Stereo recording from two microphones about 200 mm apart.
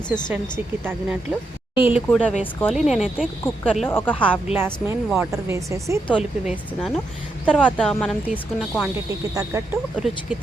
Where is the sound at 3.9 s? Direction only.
10° left (ahead or behind).